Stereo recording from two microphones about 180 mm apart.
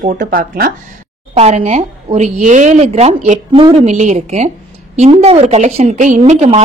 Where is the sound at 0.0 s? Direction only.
50° right (ahead or behind).